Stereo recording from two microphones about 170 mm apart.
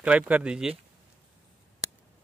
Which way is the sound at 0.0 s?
5° right (ahead or behind).